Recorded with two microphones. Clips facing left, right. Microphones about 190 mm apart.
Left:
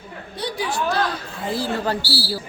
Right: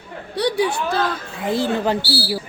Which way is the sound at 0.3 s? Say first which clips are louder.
Right 7 dB; 70° right (ahead or behind).